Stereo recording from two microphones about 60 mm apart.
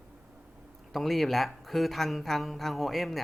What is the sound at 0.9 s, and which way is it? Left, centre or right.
Speech, centre.